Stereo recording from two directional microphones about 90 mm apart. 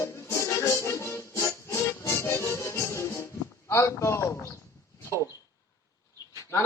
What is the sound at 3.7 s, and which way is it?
Speech, 30° left (ahead or behind).